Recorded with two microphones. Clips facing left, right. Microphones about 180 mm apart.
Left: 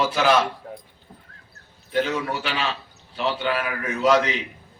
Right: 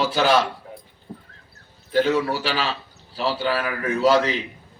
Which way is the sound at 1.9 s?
30° right (ahead or behind).